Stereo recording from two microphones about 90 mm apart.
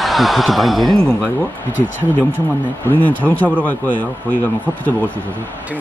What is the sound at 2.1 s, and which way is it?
Speech, 20° left (ahead or behind).